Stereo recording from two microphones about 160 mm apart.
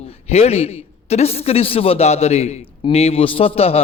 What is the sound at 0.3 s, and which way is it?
A man's voice, 40° left (ahead or behind).